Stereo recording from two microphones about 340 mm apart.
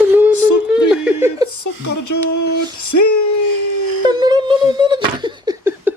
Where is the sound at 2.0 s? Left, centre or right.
Left.